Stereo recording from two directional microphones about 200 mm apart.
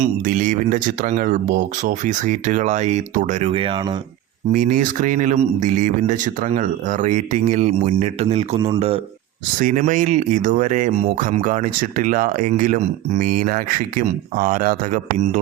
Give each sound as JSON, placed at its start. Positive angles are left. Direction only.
{"t": 0.0, "sound": "speech", "side_deg": -40}
{"t": 4.5, "sound": "speech", "side_deg": -40}
{"t": 9.6, "sound": "speech", "side_deg": -40}